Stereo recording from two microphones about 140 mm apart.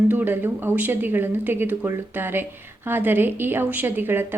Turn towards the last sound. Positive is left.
turn(degrees=-15)  # may be behind; listen again after turning